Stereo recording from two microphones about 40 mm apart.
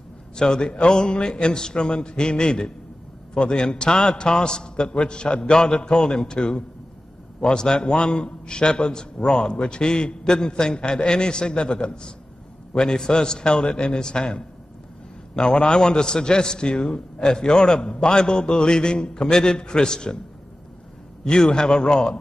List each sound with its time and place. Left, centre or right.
0.4 s a man's voice: centre
21.2 s a man's voice: left